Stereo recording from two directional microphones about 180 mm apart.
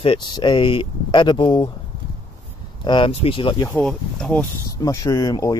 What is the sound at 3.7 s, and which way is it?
Speech, 5° left (ahead or behind).